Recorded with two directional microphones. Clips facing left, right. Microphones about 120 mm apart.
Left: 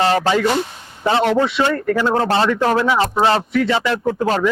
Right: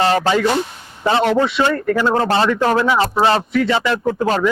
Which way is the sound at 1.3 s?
20° right (ahead or behind).